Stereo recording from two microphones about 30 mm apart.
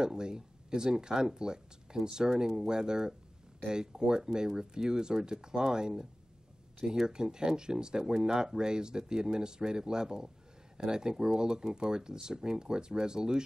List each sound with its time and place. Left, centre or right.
0.0 s speech: right
7.1 s speech: right